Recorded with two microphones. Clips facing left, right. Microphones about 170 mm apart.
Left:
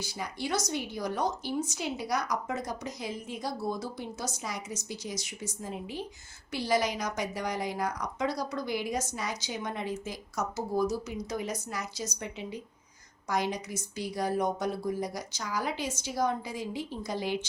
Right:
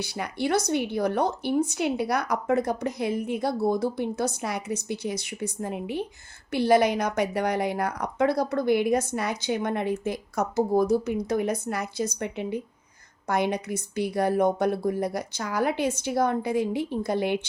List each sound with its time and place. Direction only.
0.0 s speech: 65° right (ahead or behind)